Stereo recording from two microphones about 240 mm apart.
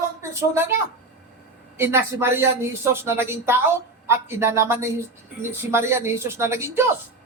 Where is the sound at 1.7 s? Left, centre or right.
Centre.